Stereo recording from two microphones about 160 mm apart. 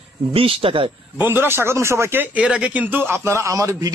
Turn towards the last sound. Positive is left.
turn(degrees=-20)  # may be behind; listen again after turning